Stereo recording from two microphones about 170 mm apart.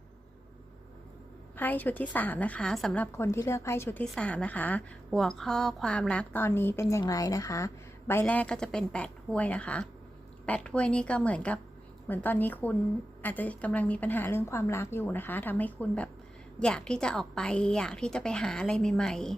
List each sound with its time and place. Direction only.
1.5 s a woman's voice: 10° left (ahead or behind)